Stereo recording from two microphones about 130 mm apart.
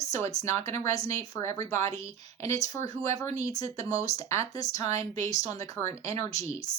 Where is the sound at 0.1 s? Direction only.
25° left (ahead or behind).